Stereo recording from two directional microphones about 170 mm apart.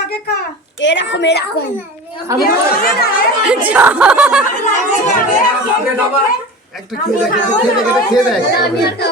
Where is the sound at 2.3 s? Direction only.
20° right (ahead or behind).